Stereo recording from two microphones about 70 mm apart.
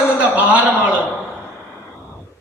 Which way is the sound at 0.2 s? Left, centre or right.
Centre.